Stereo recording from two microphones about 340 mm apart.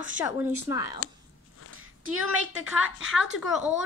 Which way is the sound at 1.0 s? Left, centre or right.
Left.